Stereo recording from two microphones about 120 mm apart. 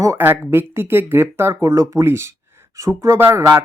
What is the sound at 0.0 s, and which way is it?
Speech, 20° right (ahead or behind).